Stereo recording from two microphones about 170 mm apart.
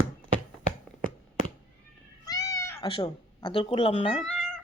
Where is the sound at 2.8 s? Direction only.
30° left (ahead or behind).